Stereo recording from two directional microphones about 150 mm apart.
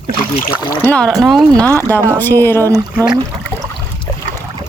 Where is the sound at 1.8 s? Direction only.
10° left (ahead or behind).